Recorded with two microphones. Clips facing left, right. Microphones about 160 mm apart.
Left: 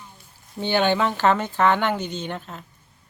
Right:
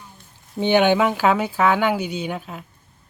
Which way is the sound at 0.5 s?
15° right (ahead or behind).